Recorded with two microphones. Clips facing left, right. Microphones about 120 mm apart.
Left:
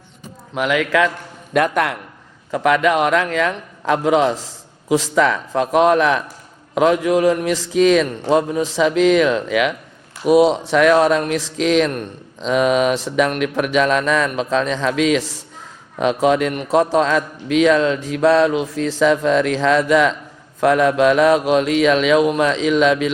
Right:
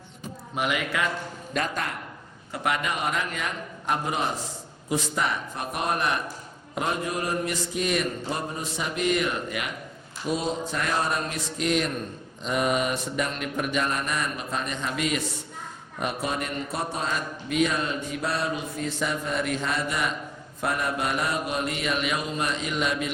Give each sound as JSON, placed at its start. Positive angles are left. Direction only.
{"t": 0.5, "sound": "speech", "side_deg": 90}
{"t": 1.5, "sound": "a man's voice", "side_deg": 65}
{"t": 2.6, "sound": "speech", "side_deg": 90}
{"t": 10.2, "sound": "speech", "side_deg": 80}